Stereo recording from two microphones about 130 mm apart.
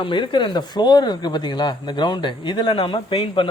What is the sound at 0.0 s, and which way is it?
Speech, 40° left (ahead or behind).